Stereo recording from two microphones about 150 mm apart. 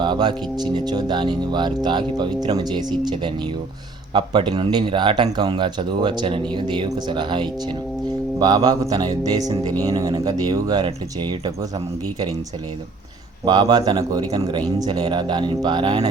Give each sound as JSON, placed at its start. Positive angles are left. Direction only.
{"t": 0.0, "sound": "speech", "side_deg": -30}
{"t": 13.4, "sound": "speech", "side_deg": -30}